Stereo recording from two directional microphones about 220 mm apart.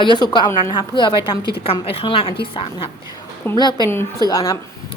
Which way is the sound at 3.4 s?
20° left (ahead or behind).